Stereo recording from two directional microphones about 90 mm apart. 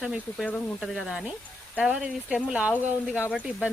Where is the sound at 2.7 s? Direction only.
25° left (ahead or behind).